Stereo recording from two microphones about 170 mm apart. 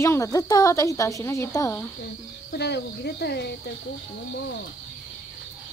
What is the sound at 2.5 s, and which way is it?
Speech, 75° left (ahead or behind).